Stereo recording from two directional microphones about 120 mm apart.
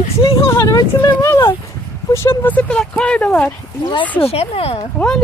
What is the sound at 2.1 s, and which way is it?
Speech, 20° left (ahead or behind).